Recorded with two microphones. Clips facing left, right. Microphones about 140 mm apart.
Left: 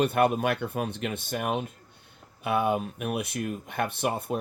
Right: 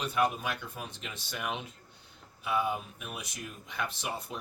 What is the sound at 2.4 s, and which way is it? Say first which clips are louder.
Speech: left 6 dB; 60° left (ahead or behind).